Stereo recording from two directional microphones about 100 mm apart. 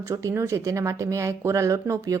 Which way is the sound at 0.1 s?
30° right (ahead or behind).